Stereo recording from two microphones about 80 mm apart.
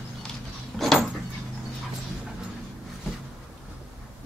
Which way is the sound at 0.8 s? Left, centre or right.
Centre.